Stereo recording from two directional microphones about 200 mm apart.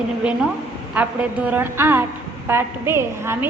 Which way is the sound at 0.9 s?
5° right (ahead or behind).